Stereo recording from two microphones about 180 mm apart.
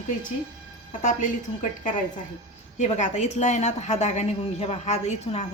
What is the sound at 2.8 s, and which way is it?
Speech, 40° left (ahead or behind).